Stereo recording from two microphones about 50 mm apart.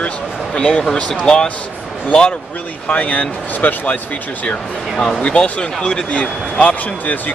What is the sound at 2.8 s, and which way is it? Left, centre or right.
Speech, left.